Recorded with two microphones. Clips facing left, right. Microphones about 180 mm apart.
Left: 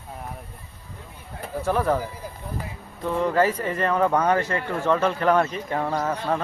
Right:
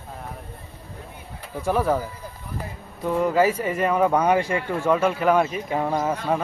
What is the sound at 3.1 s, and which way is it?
Speech, 10° right (ahead or behind).